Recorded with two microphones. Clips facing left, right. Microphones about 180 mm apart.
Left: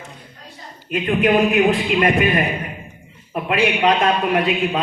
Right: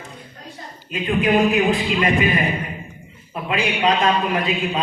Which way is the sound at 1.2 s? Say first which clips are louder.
Left 2 dB; 55° left (ahead or behind).